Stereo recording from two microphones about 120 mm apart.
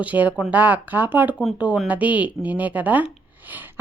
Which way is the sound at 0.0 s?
15° right (ahead or behind).